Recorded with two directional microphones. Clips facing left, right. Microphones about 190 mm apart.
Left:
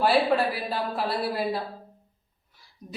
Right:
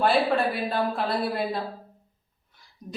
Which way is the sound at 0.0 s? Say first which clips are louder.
Even; 5° left (ahead or behind).